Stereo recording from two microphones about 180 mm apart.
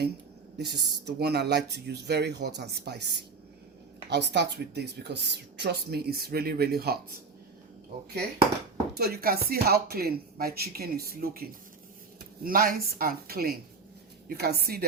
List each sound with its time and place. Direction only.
0.6 s chopping: 65° right (ahead or behind)
4.1 s speech: 70° right (ahead or behind)
9.0 s speech: 55° right (ahead or behind)